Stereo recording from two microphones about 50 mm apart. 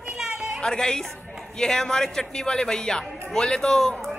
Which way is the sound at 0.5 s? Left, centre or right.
Centre.